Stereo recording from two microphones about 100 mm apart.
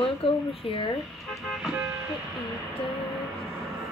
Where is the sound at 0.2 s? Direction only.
70° left (ahead or behind).